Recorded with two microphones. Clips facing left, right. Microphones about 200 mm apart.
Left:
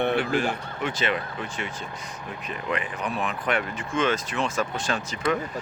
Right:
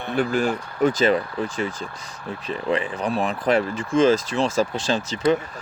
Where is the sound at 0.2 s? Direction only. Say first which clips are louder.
Right 4 dB; 40° right (ahead or behind).